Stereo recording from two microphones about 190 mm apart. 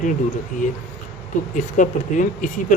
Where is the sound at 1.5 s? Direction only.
40° left (ahead or behind).